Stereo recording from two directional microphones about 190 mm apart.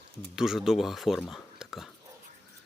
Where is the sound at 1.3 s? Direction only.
Centre (ahead or behind).